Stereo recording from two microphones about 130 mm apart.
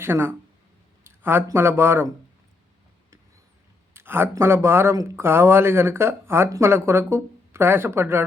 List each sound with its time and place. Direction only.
0.0 s speech: 20° right (ahead or behind)
3.9 s speech: 15° right (ahead or behind)